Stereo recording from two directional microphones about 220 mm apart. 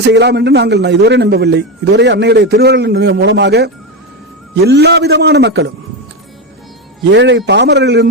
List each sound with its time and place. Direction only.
0.0 s a man's voice: 50° right (ahead or behind)
7.1 s a man's voice: 55° right (ahead or behind)